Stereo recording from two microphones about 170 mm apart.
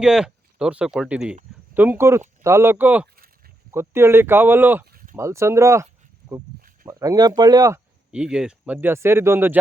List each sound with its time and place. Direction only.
0.0 s speech: 5° right (ahead or behind)
4.9 s a sound: 55° right (ahead or behind)
5.1 s speech: 15° right (ahead or behind)
8.1 s speech: 5° right (ahead or behind)